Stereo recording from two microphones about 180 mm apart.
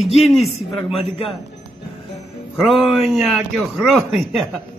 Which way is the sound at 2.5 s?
Centre (ahead or behind).